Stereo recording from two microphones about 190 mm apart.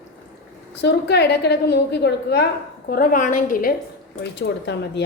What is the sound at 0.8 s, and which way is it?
A woman's voice, 60° left (ahead or behind).